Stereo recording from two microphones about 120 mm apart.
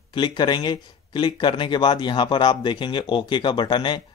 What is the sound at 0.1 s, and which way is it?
Speech, 40° left (ahead or behind).